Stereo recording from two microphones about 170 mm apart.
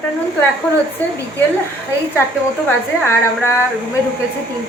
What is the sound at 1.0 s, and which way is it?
Speech, 10° left (ahead or behind).